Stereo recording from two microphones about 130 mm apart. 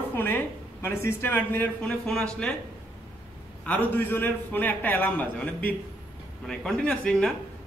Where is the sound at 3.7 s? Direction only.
15° left (ahead or behind).